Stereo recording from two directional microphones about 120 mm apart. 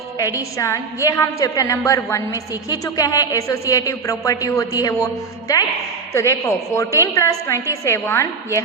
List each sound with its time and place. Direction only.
0.2 s a woman's voice: 30° left (ahead or behind)